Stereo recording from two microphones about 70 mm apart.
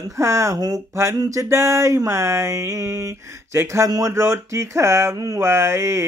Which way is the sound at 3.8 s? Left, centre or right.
Right.